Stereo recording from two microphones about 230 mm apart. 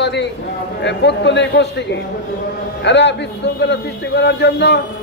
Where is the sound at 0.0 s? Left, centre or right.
Left.